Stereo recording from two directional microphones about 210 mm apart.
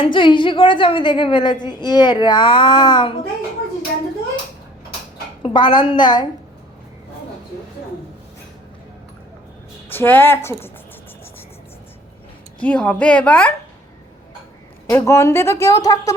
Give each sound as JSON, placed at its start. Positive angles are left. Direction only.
{"t": 0.0, "sound": "a woman's voice", "side_deg": 25}
{"t": 5.4, "sound": "a woman's voice", "side_deg": 20}
{"t": 9.9, "sound": "a woman's voice", "side_deg": 10}
{"t": 12.6, "sound": "a woman's voice", "side_deg": 5}
{"t": 14.8, "sound": "a woman's voice", "side_deg": 15}